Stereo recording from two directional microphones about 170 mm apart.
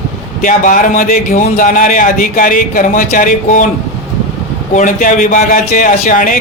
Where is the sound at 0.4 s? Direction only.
50° left (ahead or behind).